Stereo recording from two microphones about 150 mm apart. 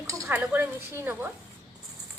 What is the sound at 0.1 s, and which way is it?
Speech, 15° right (ahead or behind).